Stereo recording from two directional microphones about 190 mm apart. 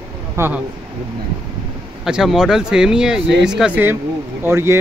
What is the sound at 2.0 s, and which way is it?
Speech, centre (ahead or behind).